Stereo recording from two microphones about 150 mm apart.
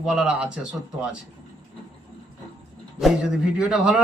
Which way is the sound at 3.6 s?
5° right (ahead or behind).